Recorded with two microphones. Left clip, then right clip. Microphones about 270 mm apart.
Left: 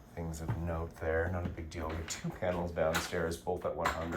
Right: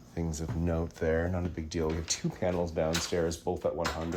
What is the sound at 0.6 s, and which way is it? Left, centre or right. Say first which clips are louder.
Speech: right 6 dB; right.